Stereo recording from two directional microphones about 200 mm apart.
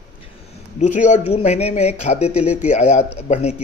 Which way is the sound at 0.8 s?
35° left (ahead or behind).